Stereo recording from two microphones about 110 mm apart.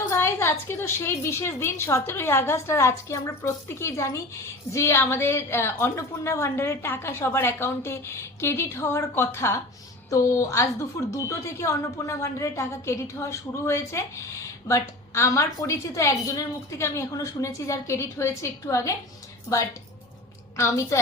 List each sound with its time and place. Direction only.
0.1 s a sound: 20° left (ahead or behind)
0.7 s a woman's voice: 20° left (ahead or behind)
20.6 s a woman's voice: 25° left (ahead or behind)